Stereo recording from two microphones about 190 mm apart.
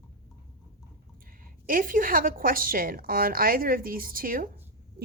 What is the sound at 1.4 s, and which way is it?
A woman's voice, 45° right (ahead or behind).